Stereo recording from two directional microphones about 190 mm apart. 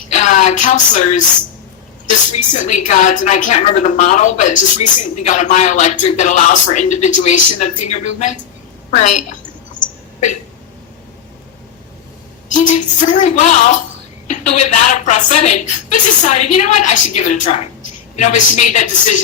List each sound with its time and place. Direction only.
0.1 s a sound: 40° left (ahead or behind)
2.3 s a woman's voice: 40° left (ahead or behind)
12.5 s a woman's voice: 40° left (ahead or behind)